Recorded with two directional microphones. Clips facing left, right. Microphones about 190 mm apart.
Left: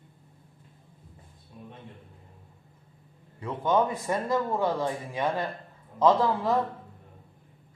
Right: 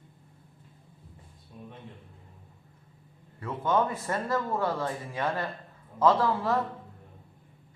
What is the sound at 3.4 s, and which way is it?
Speech, 15° left (ahead or behind).